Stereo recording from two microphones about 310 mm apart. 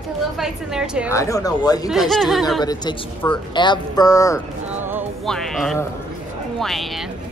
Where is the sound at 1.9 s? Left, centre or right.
Centre.